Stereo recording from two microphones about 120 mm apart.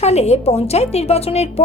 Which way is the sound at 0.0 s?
65° left (ahead or behind).